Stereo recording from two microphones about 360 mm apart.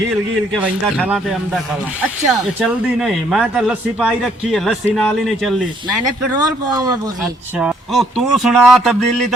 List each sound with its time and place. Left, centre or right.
0.6 s a man's voice: centre
2.6 s a man's voice: centre
6.3 s a man's voice: centre